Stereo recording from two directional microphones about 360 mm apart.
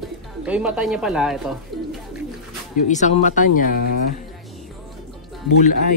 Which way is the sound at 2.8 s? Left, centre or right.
Centre.